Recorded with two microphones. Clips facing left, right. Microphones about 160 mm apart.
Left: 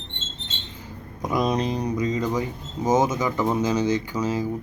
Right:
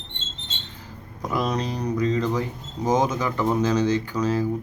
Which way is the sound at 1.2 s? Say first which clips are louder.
Left 2 dB; 15° left (ahead or behind).